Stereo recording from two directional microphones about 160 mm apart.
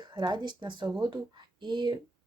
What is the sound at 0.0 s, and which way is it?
Speech, 30° right (ahead or behind).